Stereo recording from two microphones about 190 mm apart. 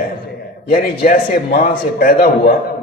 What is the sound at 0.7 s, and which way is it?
A man's voice, 50° left (ahead or behind).